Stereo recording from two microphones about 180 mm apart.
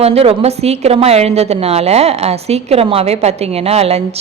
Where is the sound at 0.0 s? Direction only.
35° right (ahead or behind).